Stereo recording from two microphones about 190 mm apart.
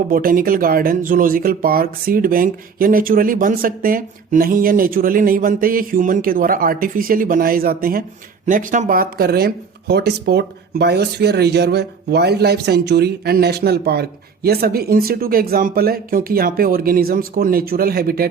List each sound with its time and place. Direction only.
0.1 s speech: 45° right (ahead or behind)